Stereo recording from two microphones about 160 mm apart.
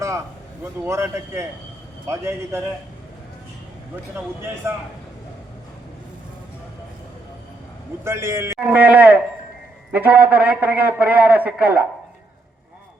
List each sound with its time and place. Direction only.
0.0 s a man's voice: 20° right (ahead or behind)
4.1 s a man's voice: 15° right (ahead or behind)
8.0 s a man's voice: 15° right (ahead or behind)